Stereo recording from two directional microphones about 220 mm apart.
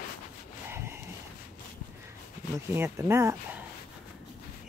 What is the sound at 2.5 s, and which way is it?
Speech, 10° right (ahead or behind).